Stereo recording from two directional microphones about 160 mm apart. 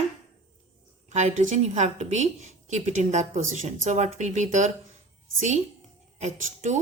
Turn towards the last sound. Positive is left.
turn(degrees=-50)  # may be behind; listen again after turning